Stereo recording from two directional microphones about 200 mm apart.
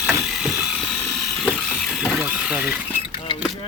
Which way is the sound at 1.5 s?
5° right (ahead or behind).